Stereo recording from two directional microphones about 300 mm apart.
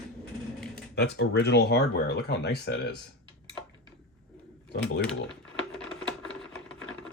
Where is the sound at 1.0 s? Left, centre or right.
Left.